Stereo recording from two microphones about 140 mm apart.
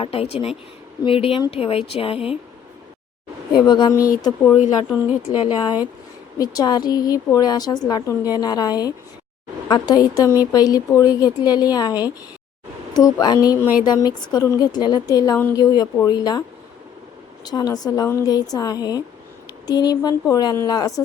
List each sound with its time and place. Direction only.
0.0 s a woman's voice: 45° left (ahead or behind)
3.7 s a woman's voice: 30° left (ahead or behind)
4.5 s speech: 10° right (ahead or behind)
5.3 s a woman's voice: 35° left (ahead or behind)
13.0 s a woman's voice: 25° left (ahead or behind)
17.4 s a woman's voice: 30° left (ahead or behind)